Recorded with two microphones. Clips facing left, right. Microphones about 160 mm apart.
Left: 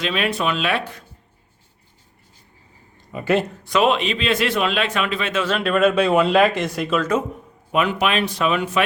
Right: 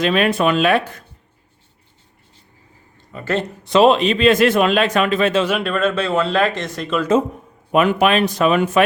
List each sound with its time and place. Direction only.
0.0 s a man's voice: 50° right (ahead or behind)
3.1 s speech: 15° left (ahead or behind)
3.6 s a man's voice: 30° right (ahead or behind)
5.6 s speech: 5° left (ahead or behind)
7.7 s a man's voice: 50° right (ahead or behind)